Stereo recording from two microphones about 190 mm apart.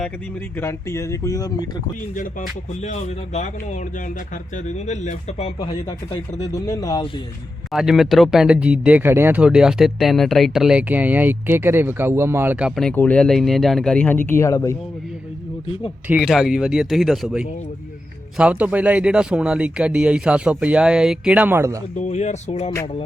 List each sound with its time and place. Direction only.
0.6 s speech: 15° left (ahead or behind)
2.8 s speech: 35° left (ahead or behind)
4.5 s speech: 35° left (ahead or behind)
6.4 s speech: 20° left (ahead or behind)
7.7 s speech: centre (ahead or behind); by 14.8 s 15° left (ahead or behind)
16.0 s speech: 5° right (ahead or behind)
21.9 s speech: 40° left (ahead or behind)